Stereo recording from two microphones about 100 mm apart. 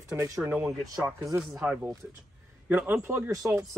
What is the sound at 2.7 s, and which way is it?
Speech, 20° right (ahead or behind).